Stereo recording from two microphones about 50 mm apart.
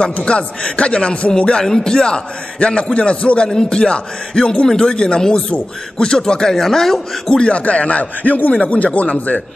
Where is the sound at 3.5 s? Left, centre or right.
Centre.